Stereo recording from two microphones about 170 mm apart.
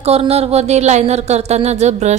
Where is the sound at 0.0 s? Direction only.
35° right (ahead or behind).